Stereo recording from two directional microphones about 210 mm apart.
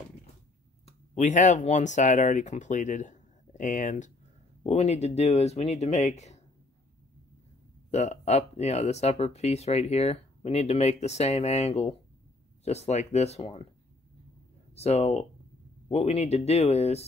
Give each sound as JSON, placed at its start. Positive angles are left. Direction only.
{"t": 0.8, "sound": "speech", "side_deg": 35}
{"t": 7.9, "sound": "speech", "side_deg": 30}
{"t": 14.8, "sound": "speech", "side_deg": 30}